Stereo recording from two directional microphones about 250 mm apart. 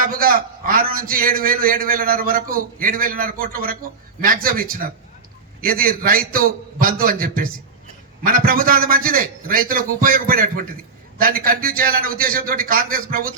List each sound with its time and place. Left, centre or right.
0.0 s a man's voice: right